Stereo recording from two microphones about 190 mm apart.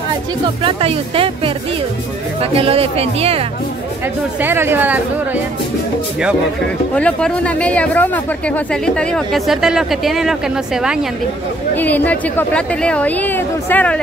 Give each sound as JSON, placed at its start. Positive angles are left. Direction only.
{"t": 0.7, "sound": "speech", "side_deg": -30}
{"t": 2.5, "sound": "speech", "side_deg": -30}
{"t": 4.4, "sound": "speech", "side_deg": -10}
{"t": 7.0, "sound": "speech", "side_deg": 5}
{"t": 11.7, "sound": "speech", "side_deg": 10}